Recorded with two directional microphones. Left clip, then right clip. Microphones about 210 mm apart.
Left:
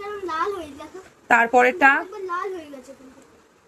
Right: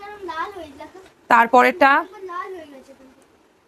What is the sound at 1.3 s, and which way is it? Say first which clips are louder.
Speech: right 3 dB; 25° right (ahead or behind).